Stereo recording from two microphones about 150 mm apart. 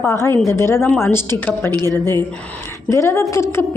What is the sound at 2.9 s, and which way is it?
Speech, 20° left (ahead or behind).